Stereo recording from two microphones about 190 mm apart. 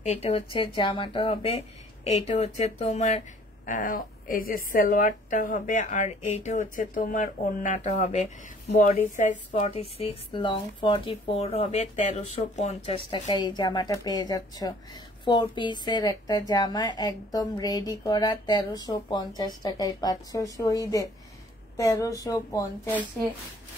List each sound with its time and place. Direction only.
0.0 s a woman's voice: 30° left (ahead or behind); by 23.0 s 15° left (ahead or behind)